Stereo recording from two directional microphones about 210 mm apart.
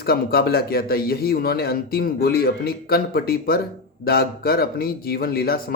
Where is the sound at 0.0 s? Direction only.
45° left (ahead or behind).